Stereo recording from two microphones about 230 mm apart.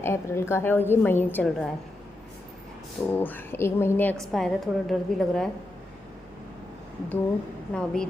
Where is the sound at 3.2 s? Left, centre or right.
Centre.